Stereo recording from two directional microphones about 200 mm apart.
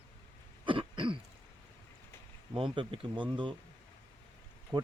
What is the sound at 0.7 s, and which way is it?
Throat clearing, 25° right (ahead or behind).